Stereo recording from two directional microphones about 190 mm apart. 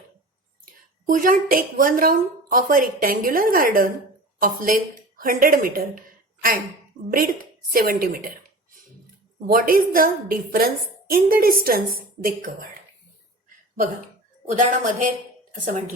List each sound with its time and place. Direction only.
0.6 s a woman's voice: 45° right (ahead or behind)
7.7 s a woman's voice: 50° right (ahead or behind)
14.5 s a woman's voice: 40° right (ahead or behind)